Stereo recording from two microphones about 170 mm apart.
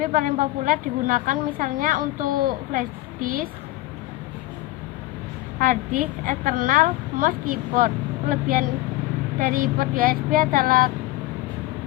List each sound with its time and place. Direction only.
0.0 s a woman's voice: 50° right (ahead or behind)
5.5 s a woman's voice: 55° right (ahead or behind)